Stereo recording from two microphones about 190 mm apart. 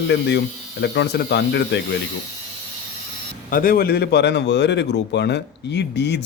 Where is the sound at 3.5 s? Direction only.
50° left (ahead or behind).